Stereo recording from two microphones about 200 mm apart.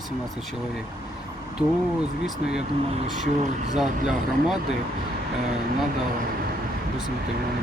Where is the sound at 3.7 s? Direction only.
Centre (ahead or behind).